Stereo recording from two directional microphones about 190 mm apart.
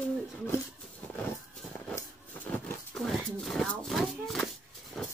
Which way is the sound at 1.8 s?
10° left (ahead or behind).